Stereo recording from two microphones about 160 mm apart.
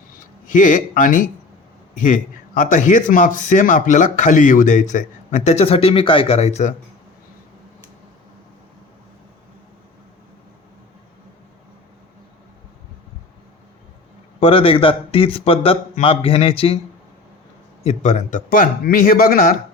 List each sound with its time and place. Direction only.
0.4 s a man's voice: 55° left (ahead or behind)
14.3 s speech: 35° left (ahead or behind)
17.8 s speech: 50° left (ahead or behind)